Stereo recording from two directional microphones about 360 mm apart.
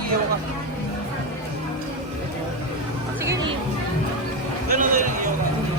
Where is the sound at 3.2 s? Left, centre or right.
Centre.